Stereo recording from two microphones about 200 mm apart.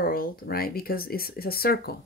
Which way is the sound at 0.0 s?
45° left (ahead or behind).